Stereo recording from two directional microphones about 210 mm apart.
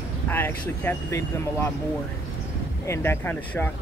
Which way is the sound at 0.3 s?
10° left (ahead or behind).